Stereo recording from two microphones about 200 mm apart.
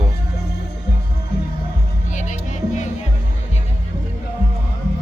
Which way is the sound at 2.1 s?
35° left (ahead or behind).